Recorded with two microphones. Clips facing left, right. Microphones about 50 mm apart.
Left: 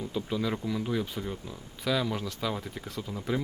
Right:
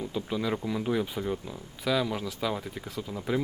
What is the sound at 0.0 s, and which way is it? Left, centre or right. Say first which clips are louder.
Speech: even; centre.